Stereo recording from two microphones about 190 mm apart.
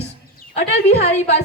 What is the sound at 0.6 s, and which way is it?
Speech, 60° left (ahead or behind).